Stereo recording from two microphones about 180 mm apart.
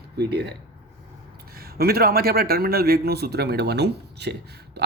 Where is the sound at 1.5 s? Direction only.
55° right (ahead or behind).